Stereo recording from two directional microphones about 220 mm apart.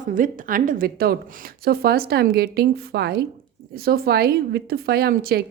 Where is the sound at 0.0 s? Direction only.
35° right (ahead or behind).